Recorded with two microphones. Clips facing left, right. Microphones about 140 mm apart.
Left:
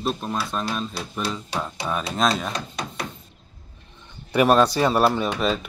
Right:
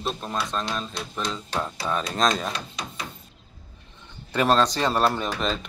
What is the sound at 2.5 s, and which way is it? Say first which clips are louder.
Speech: left 3 dB; 55° left (ahead or behind).